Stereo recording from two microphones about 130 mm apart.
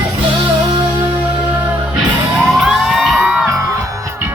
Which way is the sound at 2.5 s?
5° right (ahead or behind).